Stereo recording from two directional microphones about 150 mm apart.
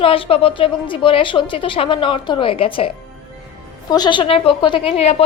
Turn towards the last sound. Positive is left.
turn(degrees=45)  # may be behind; listen again after turning